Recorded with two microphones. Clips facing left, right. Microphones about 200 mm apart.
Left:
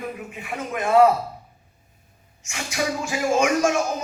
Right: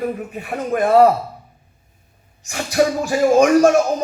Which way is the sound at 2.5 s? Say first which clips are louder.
Right 9 dB; 40° right (ahead or behind).